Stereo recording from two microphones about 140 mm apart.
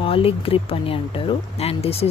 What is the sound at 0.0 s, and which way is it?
Speech, 40° left (ahead or behind).